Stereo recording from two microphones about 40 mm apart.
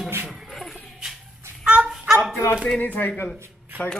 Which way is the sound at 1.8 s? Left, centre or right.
Centre.